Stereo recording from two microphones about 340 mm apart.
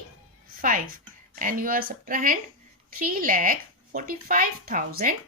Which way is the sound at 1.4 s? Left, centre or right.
Right.